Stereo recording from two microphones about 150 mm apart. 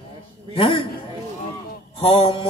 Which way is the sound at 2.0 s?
40° left (ahead or behind).